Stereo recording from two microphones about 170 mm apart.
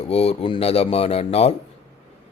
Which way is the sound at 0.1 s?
35° left (ahead or behind).